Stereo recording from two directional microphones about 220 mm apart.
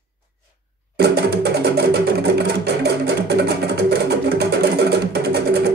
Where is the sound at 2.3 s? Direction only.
50° right (ahead or behind).